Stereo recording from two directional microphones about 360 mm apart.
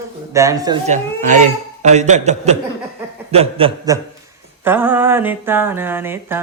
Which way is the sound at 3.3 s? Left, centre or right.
Centre.